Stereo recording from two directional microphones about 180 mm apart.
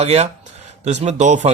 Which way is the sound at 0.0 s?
35° right (ahead or behind).